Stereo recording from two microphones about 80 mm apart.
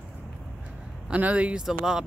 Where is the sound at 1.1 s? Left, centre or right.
Centre.